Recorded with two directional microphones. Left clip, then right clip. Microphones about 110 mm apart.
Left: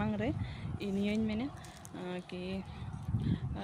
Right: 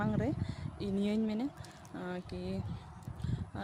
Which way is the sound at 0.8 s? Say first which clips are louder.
Even; 65° right (ahead or behind).